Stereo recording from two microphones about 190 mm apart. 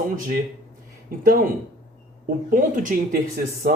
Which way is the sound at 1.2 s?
45° right (ahead or behind).